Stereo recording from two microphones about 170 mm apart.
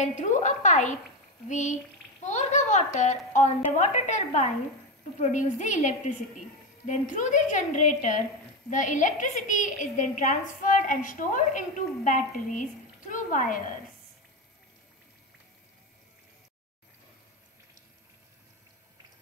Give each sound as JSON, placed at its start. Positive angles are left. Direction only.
{"t": 0.0, "sound": "a woman's voice", "side_deg": 45}